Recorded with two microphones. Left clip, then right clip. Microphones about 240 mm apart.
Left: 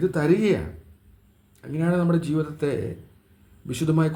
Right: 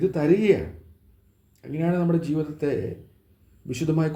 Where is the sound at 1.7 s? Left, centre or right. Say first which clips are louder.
Left 1 dB; left.